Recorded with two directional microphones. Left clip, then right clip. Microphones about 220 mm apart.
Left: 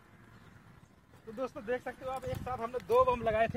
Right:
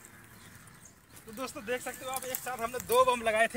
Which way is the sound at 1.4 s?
20° right (ahead or behind).